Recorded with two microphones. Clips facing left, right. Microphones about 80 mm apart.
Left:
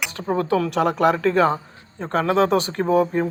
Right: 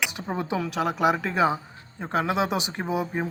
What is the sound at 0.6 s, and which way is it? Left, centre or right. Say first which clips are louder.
Speech: left 2 dB; centre.